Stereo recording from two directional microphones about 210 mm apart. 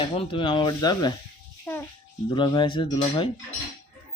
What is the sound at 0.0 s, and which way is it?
Speech, 25° left (ahead or behind).